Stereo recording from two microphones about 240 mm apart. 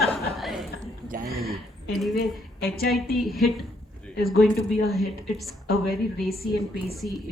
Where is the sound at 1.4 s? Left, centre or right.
Centre.